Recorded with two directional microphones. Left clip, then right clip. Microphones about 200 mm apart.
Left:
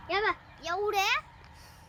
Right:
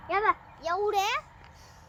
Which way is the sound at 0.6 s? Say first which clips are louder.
Right 1 dB; 15° left (ahead or behind).